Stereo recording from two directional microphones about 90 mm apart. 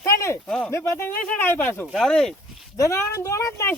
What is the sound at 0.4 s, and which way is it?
Speech, 10° left (ahead or behind).